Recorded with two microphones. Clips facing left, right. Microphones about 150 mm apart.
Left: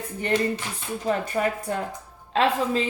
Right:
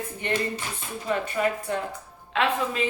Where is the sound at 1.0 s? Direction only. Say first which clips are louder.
Left 1 dB; 40° left (ahead or behind).